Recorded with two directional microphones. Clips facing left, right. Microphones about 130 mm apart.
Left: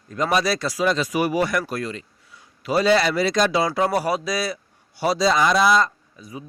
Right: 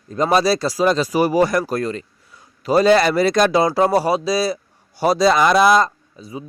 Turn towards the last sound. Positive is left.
turn(degrees=-30)  # may be behind; listen again after turning